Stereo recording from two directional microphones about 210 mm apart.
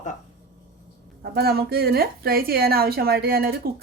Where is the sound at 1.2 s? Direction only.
50° right (ahead or behind).